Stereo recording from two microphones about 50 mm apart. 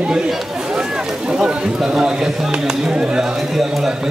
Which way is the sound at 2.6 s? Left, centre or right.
Centre.